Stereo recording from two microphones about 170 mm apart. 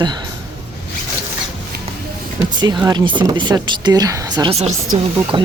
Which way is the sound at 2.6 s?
25° right (ahead or behind).